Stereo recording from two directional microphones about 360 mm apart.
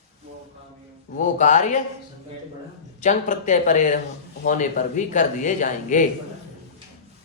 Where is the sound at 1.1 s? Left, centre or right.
Left.